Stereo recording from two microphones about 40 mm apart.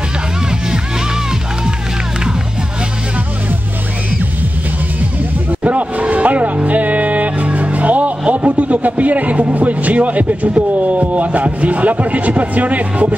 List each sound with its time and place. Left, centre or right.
5.5 s music: right
8.2 s speech: right